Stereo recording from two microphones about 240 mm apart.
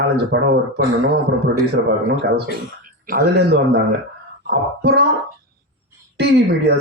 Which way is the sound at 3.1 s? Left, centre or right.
Right.